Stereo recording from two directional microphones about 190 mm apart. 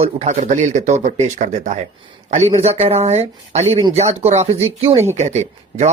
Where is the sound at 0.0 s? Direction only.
35° right (ahead or behind).